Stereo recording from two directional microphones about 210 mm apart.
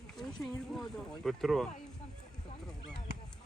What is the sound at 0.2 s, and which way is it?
Speech, centre (ahead or behind).